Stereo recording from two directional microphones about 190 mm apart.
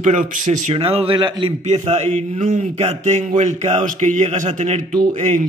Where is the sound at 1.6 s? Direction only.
35° right (ahead or behind).